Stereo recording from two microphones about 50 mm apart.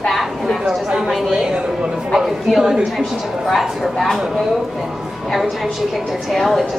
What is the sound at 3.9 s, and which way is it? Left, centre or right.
Speech, centre.